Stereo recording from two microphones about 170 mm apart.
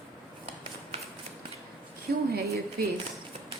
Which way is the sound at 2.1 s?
65° right (ahead or behind).